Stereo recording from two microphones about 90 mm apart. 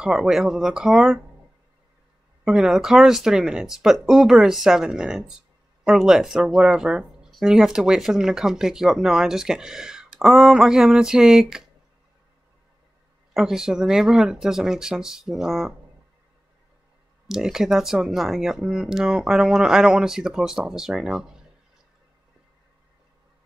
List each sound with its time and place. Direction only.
0.0 s speech: 5° right (ahead or behind)
2.4 s speech: 5° right (ahead or behind)
13.3 s speech: 5° right (ahead or behind)
17.3 s speech: 5° right (ahead or behind)